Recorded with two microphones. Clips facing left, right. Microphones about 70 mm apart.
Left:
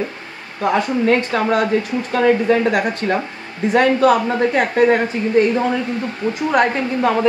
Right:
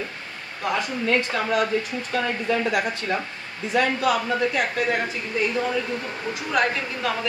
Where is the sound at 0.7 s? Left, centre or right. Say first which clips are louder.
Left 7 dB; left.